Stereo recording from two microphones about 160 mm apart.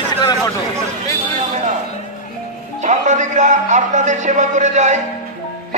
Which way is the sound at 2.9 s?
50° right (ahead or behind).